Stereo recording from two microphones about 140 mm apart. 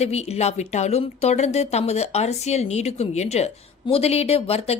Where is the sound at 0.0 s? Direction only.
50° left (ahead or behind).